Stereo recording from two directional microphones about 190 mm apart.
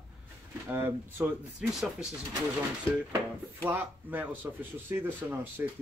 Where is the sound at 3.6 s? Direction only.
10° right (ahead or behind).